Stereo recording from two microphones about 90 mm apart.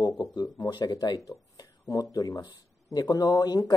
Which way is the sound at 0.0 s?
55° left (ahead or behind).